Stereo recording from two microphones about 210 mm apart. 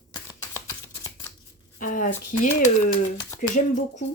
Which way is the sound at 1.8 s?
40° left (ahead or behind).